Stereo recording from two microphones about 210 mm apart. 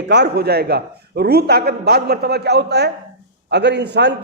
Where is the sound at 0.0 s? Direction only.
55° right (ahead or behind).